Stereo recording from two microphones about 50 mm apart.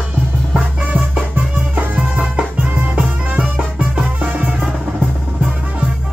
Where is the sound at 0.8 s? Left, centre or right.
Right.